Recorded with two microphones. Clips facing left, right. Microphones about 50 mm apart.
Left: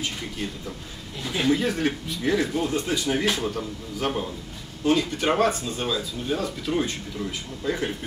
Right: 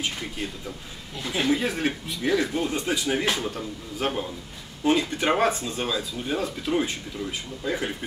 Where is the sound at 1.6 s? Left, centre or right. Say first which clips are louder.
Left 2 dB; right.